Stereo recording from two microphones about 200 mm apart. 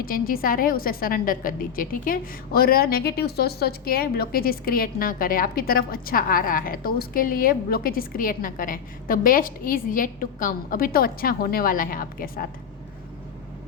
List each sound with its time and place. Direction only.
0.0 s a woman's voice: 45° left (ahead or behind)